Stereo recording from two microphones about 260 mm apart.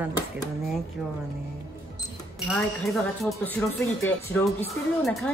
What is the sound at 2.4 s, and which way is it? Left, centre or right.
Speech, centre.